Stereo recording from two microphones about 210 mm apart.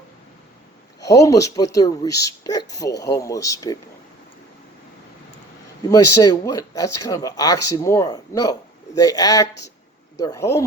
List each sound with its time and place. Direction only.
1.0 s speech: 15° left (ahead or behind)
5.9 s speech: 15° left (ahead or behind)